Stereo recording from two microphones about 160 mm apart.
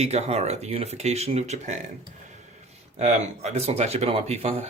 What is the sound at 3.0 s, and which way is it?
Speech, 45° right (ahead or behind).